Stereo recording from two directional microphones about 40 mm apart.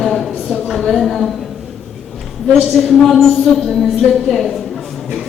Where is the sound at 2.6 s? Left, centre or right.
Centre.